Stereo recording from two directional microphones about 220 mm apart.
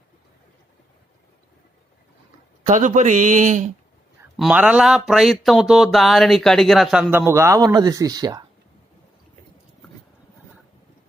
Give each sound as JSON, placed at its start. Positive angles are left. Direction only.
{"t": 2.6, "sound": "speech", "side_deg": -35}
{"t": 4.4, "sound": "speech", "side_deg": -5}